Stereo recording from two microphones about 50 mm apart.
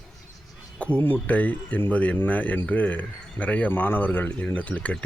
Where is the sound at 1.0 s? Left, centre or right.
Left.